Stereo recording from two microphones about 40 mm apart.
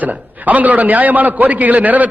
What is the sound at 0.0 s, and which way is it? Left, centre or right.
A man's voice, right.